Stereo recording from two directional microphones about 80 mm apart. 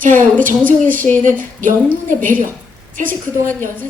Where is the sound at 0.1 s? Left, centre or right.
Left.